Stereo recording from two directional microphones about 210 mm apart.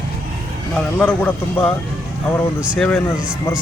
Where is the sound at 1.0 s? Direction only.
5° left (ahead or behind).